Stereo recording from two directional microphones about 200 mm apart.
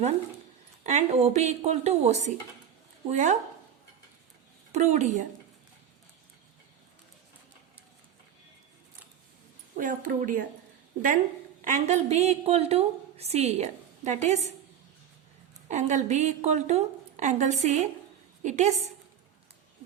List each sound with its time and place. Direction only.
0.9 s a woman's voice: 35° right (ahead or behind)
4.7 s a woman's voice: 35° right (ahead or behind)
9.7 s a woman's voice: 40° right (ahead or behind)
11.6 s a woman's voice: 35° right (ahead or behind)
15.7 s a woman's voice: 35° right (ahead or behind)